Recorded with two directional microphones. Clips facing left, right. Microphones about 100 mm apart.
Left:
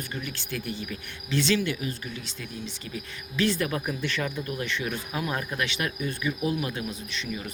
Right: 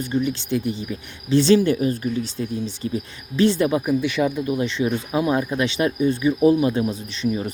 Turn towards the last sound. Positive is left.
turn(degrees=-30)  # may be behind; listen again after turning